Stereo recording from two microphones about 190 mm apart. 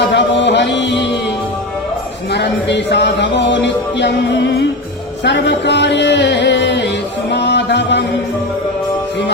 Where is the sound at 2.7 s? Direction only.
65° left (ahead or behind).